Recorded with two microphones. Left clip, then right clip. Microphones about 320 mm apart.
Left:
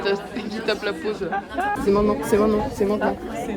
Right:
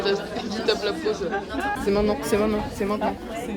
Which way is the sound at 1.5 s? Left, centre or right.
Centre.